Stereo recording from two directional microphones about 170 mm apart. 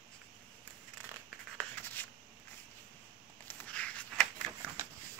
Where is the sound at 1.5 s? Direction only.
10° left (ahead or behind).